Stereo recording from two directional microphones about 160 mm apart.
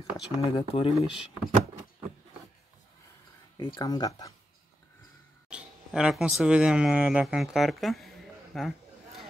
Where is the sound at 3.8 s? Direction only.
25° left (ahead or behind).